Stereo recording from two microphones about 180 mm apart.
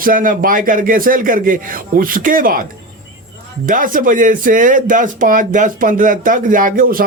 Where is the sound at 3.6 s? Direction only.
50° right (ahead or behind).